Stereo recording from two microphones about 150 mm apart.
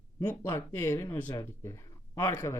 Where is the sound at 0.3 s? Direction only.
15° left (ahead or behind).